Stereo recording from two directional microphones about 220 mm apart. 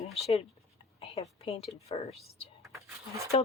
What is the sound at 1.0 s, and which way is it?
Speech, 25° left (ahead or behind).